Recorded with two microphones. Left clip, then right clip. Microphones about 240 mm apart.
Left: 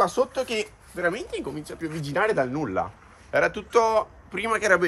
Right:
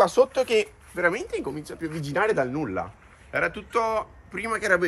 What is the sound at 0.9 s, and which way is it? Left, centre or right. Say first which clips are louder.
Speech: right 2 dB; centre.